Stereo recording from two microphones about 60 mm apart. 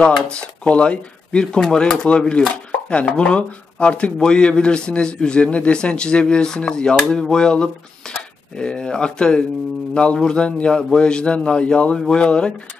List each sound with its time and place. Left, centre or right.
0.3 s speech: centre